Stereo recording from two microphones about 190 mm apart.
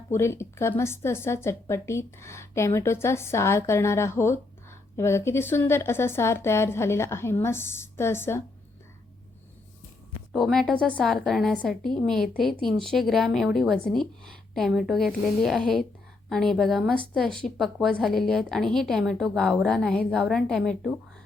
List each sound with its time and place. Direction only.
0.1 s a woman's voice: 15° left (ahead or behind)
10.3 s speech: centre (ahead or behind)